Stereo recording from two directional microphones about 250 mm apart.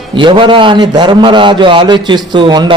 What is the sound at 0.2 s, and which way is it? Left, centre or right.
A man's voice, centre.